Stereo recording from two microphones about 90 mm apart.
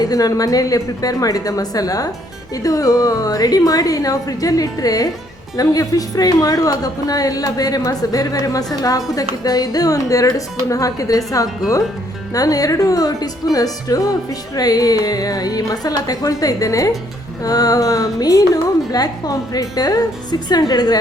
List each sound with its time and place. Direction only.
0.0 s speech: 45° left (ahead or behind)
12.3 s speech: 40° left (ahead or behind)